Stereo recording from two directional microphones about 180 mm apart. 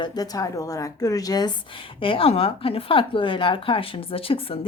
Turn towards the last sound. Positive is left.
turn(degrees=30)  # may be behind; listen again after turning